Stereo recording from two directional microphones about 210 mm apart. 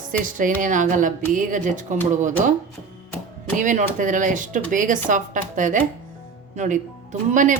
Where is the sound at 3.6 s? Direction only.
35° right (ahead or behind).